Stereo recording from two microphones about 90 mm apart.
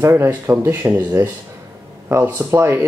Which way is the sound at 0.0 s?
25° right (ahead or behind).